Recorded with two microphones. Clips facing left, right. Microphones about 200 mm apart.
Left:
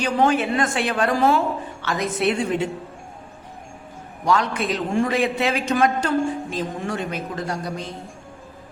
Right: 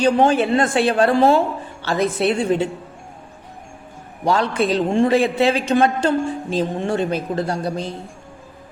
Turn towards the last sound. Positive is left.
turn(degrees=-30)  # may be behind; listen again after turning